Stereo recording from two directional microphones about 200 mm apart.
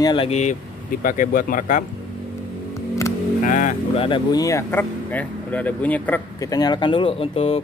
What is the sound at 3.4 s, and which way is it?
Speech, 40° left (ahead or behind).